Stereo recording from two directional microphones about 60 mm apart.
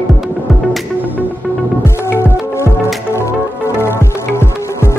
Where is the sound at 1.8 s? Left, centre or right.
Left.